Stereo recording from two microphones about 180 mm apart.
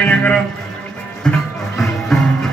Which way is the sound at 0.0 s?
10° left (ahead or behind).